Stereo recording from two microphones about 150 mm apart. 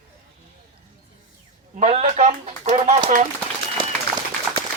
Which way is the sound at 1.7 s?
50° right (ahead or behind).